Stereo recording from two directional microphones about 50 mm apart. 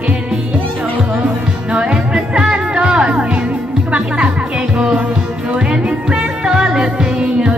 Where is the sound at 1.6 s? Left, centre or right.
Right.